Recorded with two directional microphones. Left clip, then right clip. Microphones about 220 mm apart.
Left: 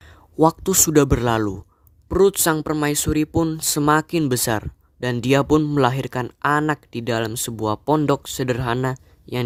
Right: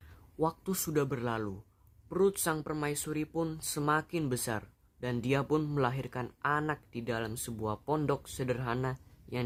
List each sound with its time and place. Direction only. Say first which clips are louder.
0.3 s speech: left 16 dB; 50° left (ahead or behind)